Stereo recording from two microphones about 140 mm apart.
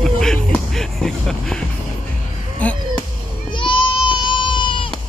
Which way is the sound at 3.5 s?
35° left (ahead or behind).